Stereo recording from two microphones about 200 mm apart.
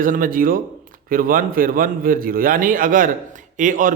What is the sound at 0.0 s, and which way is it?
A man's voice, 45° right (ahead or behind).